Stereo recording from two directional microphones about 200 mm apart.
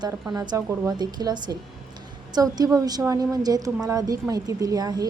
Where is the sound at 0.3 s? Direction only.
20° right (ahead or behind).